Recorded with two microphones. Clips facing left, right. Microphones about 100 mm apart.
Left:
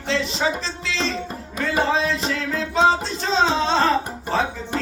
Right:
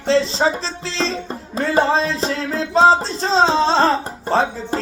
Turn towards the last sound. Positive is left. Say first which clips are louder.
# right 5 dB
turn(degrees=-30)  # may be behind; listen again after turning